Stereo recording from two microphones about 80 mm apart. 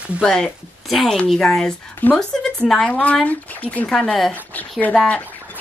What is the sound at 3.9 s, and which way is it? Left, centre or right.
Speech, centre.